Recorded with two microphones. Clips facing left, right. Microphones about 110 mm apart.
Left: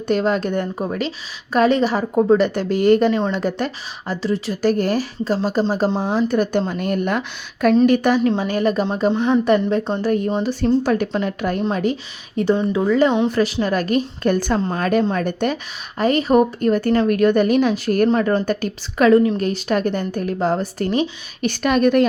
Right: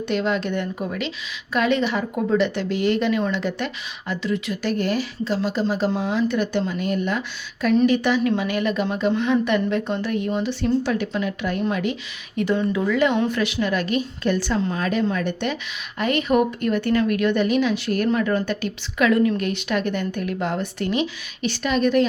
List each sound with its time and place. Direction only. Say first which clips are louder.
0.1 s a woman's voice: left 5 dB; 40° left (ahead or behind)
8.2 s a woman's voice: left 3 dB; 35° left (ahead or behind)
9.1 s speech: left 3 dB; 25° left (ahead or behind)
9.4 s a woman's voice: left 4 dB; 35° left (ahead or behind); by 22.0 s 50° left (ahead or behind)